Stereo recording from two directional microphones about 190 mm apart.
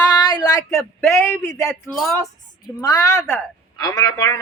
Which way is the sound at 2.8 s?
20° left (ahead or behind).